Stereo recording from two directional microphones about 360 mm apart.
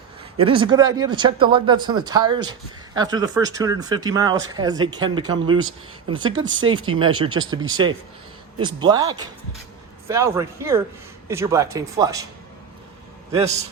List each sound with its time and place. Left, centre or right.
0.3 s speech: centre
6.3 s speech: right
6.7 s speech: centre